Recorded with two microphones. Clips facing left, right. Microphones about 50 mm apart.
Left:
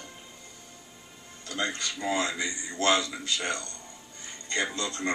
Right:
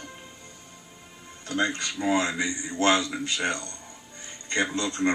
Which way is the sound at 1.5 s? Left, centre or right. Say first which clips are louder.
Right 4 dB; right.